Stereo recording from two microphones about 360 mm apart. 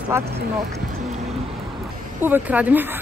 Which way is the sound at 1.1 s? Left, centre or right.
Centre.